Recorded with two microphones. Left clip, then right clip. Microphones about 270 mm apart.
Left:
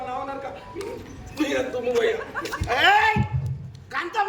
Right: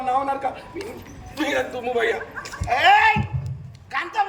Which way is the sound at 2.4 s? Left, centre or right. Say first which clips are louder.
Right 1 dB; centre.